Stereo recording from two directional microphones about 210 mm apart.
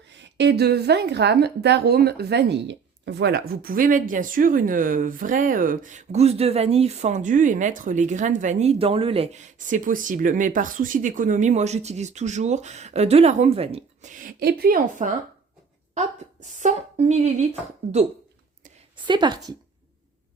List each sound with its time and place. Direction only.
0.2 s a woman's voice: 55° right (ahead or behind); by 17.2 s 35° right (ahead or behind)
19.0 s a woman's voice: 20° right (ahead or behind)